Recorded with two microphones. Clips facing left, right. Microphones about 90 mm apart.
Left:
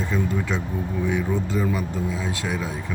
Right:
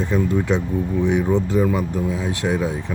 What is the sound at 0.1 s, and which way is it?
Speech, 20° right (ahead or behind).